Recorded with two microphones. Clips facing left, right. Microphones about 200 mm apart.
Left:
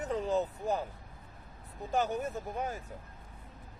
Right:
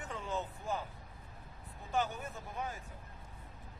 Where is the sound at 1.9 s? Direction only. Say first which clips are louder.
Left 5 dB; 40° left (ahead or behind).